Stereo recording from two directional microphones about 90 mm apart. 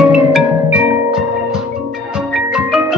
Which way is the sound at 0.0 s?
10° right (ahead or behind).